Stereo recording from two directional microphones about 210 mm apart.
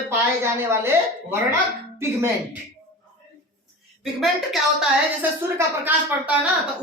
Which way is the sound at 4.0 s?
Centre (ahead or behind).